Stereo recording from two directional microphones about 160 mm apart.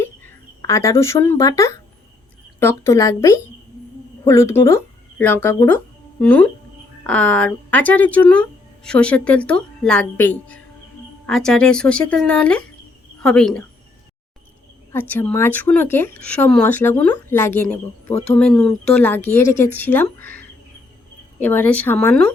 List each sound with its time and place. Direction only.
0.0 s a sound: 15° left (ahead or behind)
0.6 s a woman's voice: 15° left (ahead or behind)
14.9 s a woman's voice: 10° left (ahead or behind)